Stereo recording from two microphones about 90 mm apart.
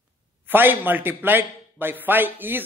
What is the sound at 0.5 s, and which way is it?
Speech, 20° right (ahead or behind).